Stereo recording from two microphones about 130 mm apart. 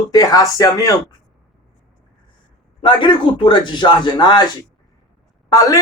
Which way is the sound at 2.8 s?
40° left (ahead or behind).